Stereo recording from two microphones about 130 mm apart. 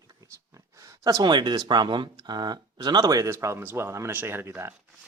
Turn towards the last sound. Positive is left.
turn(degrees=-20)  # may be behind; listen again after turning